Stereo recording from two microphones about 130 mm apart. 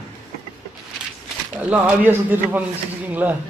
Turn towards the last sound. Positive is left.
turn(degrees=-15)  # may be behind; listen again after turning